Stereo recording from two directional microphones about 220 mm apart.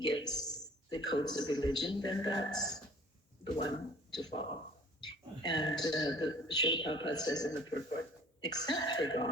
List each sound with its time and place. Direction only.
0.0 s a man's voice: 20° left (ahead or behind)